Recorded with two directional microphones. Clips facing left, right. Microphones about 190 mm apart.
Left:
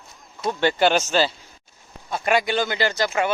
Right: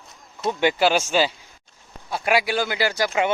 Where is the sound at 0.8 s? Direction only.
10° right (ahead or behind).